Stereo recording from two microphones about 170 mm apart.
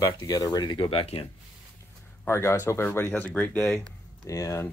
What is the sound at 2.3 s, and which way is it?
Speech, 15° left (ahead or behind).